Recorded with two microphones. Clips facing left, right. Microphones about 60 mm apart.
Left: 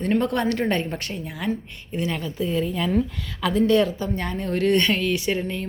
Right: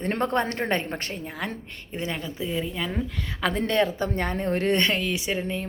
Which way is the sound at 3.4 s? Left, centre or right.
Right.